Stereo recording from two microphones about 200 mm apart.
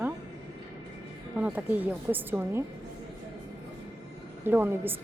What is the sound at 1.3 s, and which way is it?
A woman's voice, 5° right (ahead or behind).